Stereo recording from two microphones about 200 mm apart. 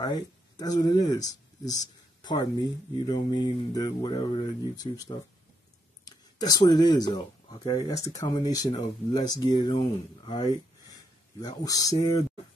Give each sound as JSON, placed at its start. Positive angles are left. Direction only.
{"t": 0.0, "sound": "speech", "side_deg": 20}
{"t": 6.0, "sound": "speech", "side_deg": 20}